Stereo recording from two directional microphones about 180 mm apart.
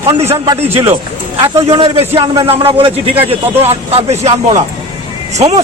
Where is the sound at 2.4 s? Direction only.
30° right (ahead or behind).